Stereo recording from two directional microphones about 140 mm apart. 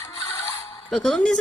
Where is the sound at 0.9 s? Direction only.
5° left (ahead or behind).